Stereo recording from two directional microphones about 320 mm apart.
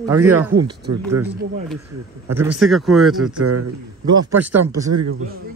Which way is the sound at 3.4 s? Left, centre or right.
Right.